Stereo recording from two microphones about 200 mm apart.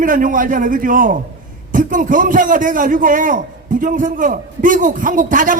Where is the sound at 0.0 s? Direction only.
40° right (ahead or behind).